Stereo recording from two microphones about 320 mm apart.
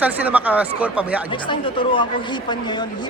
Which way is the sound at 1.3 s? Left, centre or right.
Centre.